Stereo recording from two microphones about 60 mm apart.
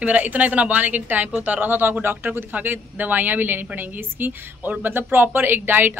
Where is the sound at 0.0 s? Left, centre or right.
Right.